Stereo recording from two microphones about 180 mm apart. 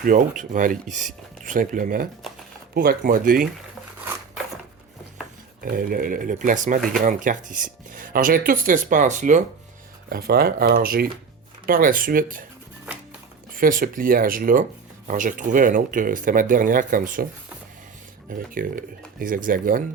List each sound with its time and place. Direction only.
0.0 s speech: 50° right (ahead or behind)
5.6 s speech: 55° right (ahead or behind)
10.1 s speech: 55° right (ahead or behind)
12.9 s music: 5° right (ahead or behind)
13.5 s speech: 50° right (ahead or behind)
18.3 s speech: 50° right (ahead or behind)